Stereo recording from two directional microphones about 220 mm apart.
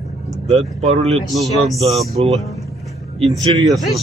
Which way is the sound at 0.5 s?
30° right (ahead or behind).